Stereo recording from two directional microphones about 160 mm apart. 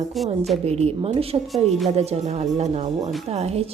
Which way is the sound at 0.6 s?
40° right (ahead or behind).